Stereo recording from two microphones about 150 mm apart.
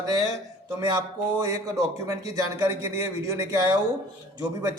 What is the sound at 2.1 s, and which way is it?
Speech, 20° right (ahead or behind).